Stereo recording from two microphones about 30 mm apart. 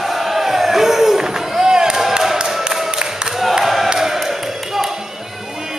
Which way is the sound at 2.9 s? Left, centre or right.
Right.